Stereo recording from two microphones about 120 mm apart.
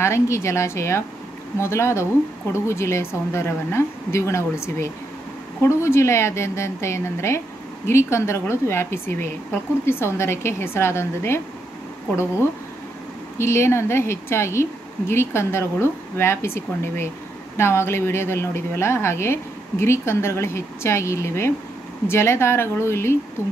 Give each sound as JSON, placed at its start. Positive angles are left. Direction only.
{"t": 0.0, "sound": "a woman's voice", "side_deg": 25}
{"t": 13.4, "sound": "a woman's voice", "side_deg": 20}